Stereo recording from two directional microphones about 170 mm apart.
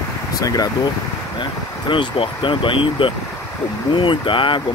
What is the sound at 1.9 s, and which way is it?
Speech, 30° left (ahead or behind).